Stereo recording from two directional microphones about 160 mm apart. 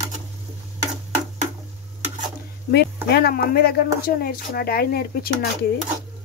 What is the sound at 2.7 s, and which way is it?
Speech, 90° left.